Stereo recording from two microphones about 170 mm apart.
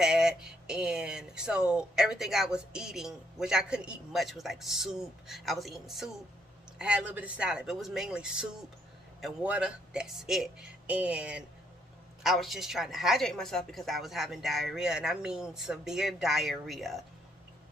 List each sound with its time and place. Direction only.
0.0 s speech: 5° right (ahead or behind)